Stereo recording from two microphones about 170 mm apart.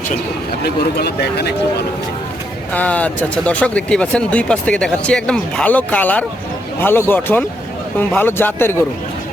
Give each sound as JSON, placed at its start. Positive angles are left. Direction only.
{"t": 0.6, "sound": "speech", "side_deg": 70}
{"t": 2.7, "sound": "speech", "side_deg": 10}